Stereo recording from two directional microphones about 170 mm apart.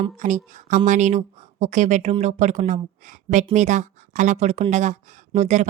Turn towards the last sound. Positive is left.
turn(degrees=-45)  # may be behind; listen again after turning